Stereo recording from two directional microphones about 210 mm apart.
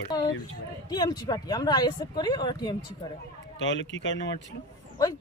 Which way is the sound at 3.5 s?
60° left (ahead or behind).